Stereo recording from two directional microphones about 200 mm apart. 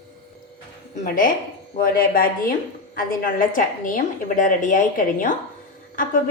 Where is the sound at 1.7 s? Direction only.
45° left (ahead or behind).